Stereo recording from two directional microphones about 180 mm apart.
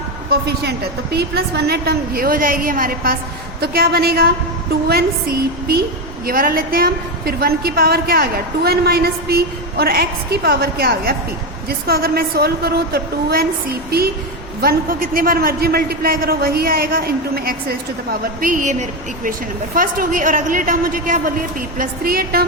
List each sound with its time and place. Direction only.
0.3 s a woman's voice: 65° right (ahead or behind)
14.6 s a woman's voice: 55° right (ahead or behind)